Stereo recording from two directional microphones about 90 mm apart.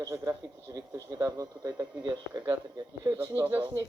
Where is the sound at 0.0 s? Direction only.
40° right (ahead or behind).